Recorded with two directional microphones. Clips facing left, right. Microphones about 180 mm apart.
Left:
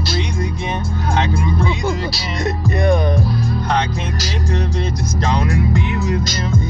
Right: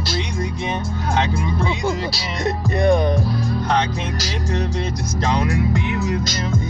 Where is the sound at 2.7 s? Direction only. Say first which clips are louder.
Right 1 dB; 25° right (ahead or behind).